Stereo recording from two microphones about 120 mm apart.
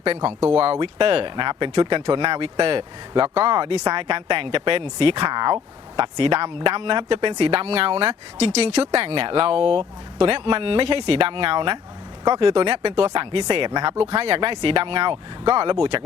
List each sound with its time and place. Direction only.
0.3 s speech: 15° right (ahead or behind)
0.6 s speech: 50° right (ahead or behind)
14.0 s speech: 55° right (ahead or behind)